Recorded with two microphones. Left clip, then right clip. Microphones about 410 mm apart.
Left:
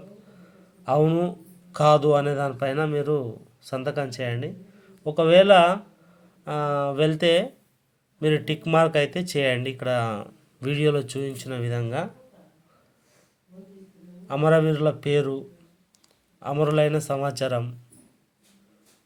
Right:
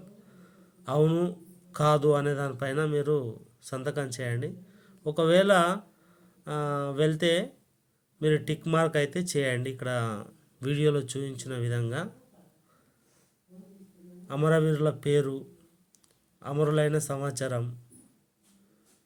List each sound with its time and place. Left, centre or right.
0.9 s a man's voice: right
14.3 s speech: right